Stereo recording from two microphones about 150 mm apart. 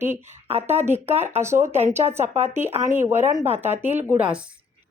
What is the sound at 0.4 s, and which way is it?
Speech, 45° right (ahead or behind).